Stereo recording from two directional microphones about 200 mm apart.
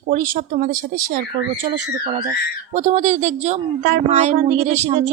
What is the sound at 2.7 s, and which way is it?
Speech, 35° right (ahead or behind).